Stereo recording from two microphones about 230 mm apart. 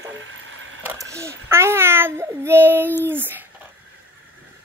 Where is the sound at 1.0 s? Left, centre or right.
Centre.